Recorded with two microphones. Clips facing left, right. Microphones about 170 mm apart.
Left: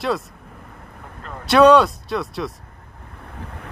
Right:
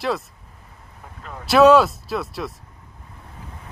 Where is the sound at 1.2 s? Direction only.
Centre (ahead or behind).